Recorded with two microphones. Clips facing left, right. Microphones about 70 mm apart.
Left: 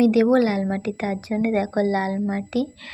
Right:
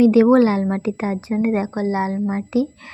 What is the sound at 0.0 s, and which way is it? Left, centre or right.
A woman's voice, right.